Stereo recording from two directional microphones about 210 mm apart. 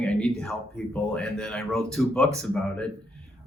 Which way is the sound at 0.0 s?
5° left (ahead or behind).